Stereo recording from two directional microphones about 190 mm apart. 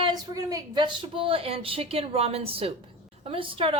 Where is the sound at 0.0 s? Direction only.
20° right (ahead or behind).